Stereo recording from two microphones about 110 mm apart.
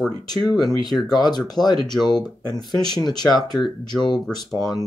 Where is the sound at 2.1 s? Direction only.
40° left (ahead or behind).